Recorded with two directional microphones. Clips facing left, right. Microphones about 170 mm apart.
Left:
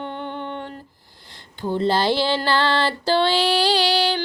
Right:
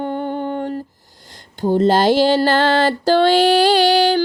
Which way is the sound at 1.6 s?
40° right (ahead or behind).